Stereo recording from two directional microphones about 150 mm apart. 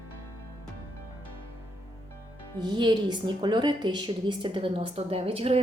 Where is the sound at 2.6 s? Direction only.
30° right (ahead or behind).